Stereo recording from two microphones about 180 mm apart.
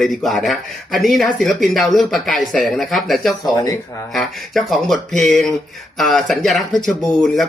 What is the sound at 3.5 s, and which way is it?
Speech, 20° left (ahead or behind).